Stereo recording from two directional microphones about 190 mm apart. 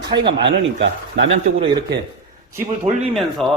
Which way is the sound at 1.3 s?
30° right (ahead or behind).